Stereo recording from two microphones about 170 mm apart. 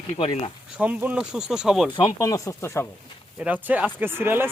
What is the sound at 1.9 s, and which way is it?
Speech, 20° left (ahead or behind).